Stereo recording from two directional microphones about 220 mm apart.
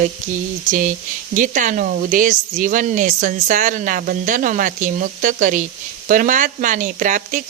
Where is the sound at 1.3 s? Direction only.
35° right (ahead or behind).